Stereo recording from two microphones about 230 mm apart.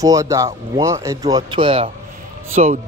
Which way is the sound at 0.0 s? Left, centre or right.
Centre.